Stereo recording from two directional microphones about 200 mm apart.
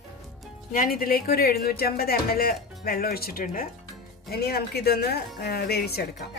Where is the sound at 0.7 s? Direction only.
45° left (ahead or behind).